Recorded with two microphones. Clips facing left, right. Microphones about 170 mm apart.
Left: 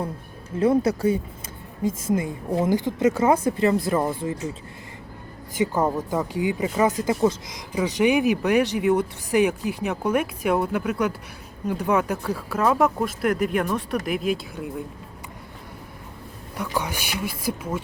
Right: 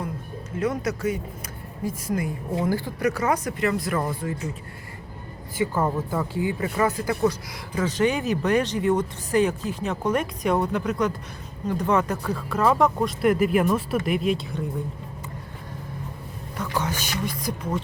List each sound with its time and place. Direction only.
0.6 s a woman's voice: 30° left (ahead or behind)
5.5 s speech: 20° left (ahead or behind); by 14.6 s centre (ahead or behind)
16.6 s speech: 10° left (ahead or behind)